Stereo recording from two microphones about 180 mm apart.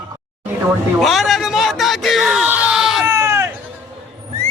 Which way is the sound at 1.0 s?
Centre (ahead or behind).